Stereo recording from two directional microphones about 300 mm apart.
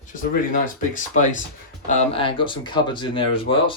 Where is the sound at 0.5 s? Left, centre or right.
Left.